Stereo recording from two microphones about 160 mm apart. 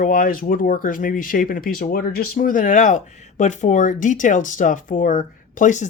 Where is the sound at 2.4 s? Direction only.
55° left (ahead or behind).